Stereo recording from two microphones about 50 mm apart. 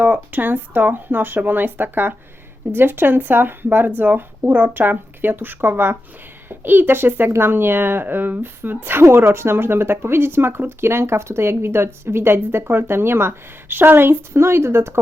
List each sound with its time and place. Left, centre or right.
0.0 s speech: right